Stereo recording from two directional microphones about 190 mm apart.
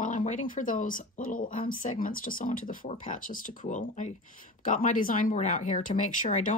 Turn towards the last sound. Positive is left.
turn(degrees=40)  # may be behind; listen again after turning